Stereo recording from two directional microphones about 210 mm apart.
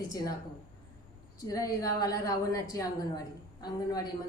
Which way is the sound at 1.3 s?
15° left (ahead or behind).